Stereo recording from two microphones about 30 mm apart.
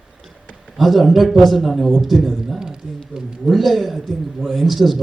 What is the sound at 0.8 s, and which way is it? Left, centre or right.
Speech, centre.